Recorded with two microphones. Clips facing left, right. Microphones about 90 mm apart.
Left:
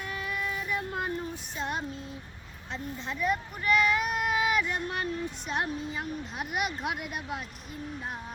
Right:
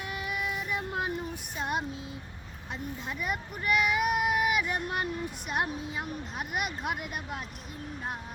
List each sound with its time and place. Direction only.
0.0 s music: 10° right (ahead or behind)
1.5 s child singing: 5° right (ahead or behind)
3.1 s child singing: 10° right (ahead or behind)
5.5 s a woman's voice: 5° right (ahead or behind)